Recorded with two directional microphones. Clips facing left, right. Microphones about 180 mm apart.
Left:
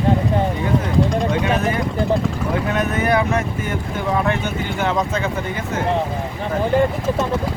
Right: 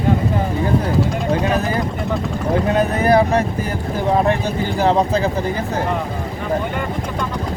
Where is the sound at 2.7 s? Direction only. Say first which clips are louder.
Right 4 dB; 35° right (ahead or behind).